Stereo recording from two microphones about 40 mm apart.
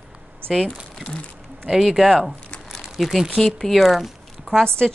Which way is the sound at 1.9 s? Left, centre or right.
Centre.